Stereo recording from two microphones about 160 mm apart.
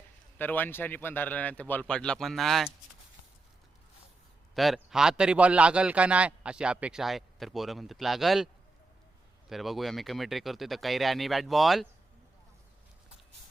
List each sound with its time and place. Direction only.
0.3 s a man's voice: 10° left (ahead or behind)
4.5 s a man's voice: centre (ahead or behind)
9.5 s a man's voice: centre (ahead or behind)